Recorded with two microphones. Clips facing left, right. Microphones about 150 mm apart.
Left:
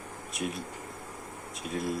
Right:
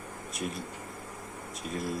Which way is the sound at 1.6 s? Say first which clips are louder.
Left 2 dB; centre (ahead or behind).